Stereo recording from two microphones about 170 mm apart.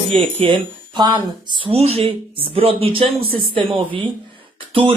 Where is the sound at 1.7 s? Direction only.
35° right (ahead or behind).